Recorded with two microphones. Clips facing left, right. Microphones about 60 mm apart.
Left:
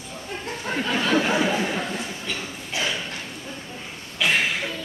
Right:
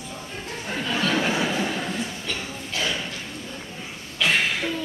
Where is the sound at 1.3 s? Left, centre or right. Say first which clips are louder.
Left 3 dB; left.